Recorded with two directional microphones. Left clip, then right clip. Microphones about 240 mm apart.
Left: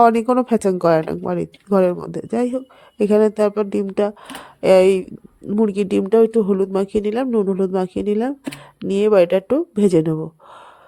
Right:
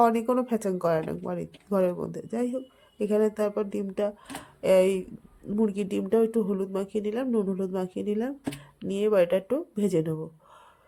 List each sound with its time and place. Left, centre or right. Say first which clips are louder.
0.0 s speech: left 9 dB; left